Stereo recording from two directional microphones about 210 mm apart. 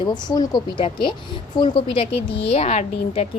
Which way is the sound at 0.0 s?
20° left (ahead or behind).